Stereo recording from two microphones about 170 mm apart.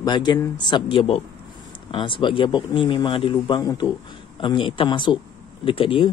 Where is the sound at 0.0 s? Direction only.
25° left (ahead or behind).